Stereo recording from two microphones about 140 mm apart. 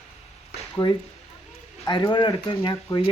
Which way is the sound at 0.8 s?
30° left (ahead or behind).